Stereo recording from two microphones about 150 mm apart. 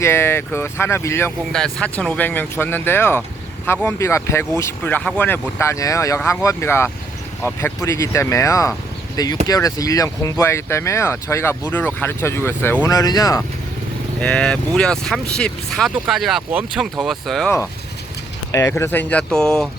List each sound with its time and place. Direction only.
0.0 s speech: 15° left (ahead or behind)
1.5 s speech: 5° left (ahead or behind); by 13.4 s 25° left (ahead or behind)
14.2 s speech: 5° left (ahead or behind)
18.5 s speech: 15° left (ahead or behind)